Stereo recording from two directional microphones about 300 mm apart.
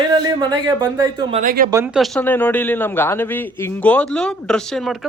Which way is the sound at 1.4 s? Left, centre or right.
Right.